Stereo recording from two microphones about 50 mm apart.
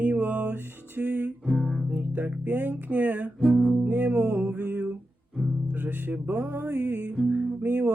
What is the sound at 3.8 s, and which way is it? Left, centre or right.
Music, right.